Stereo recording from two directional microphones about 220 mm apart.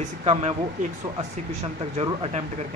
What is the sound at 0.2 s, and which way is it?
Speech, 30° right (ahead or behind).